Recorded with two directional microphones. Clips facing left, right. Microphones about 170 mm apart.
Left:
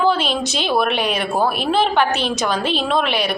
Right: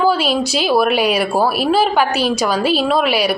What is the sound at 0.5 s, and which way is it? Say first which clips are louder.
A woman's voice: right 4 dB; 5° right (ahead or behind).